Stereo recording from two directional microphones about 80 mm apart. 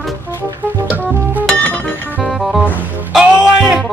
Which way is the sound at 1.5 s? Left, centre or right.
Left.